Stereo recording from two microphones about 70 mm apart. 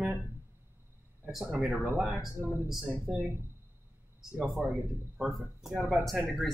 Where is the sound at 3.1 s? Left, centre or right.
Right.